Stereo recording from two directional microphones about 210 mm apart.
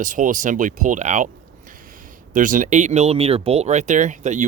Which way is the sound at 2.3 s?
40° right (ahead or behind).